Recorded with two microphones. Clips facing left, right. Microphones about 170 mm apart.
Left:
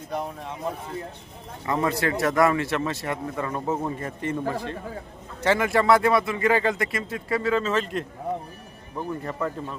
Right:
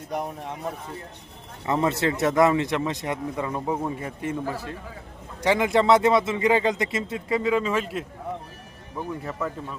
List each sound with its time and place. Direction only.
0.1 s speech: 15° right (ahead or behind)
1.6 s a man's voice: 20° right (ahead or behind); by 9.5 s 5° right (ahead or behind)